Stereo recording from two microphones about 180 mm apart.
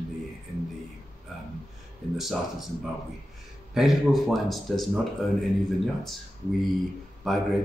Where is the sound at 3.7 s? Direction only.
Centre (ahead or behind).